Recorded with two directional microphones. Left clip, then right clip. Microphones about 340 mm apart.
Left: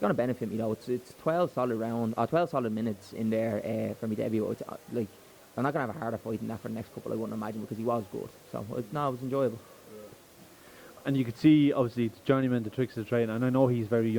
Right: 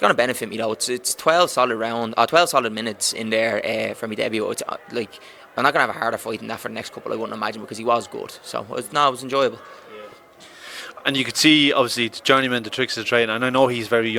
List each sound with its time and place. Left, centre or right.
0.0 s speech: centre
10.8 s speech: centre